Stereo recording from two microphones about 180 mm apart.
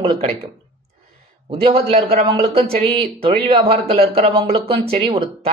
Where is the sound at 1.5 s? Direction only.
30° right (ahead or behind).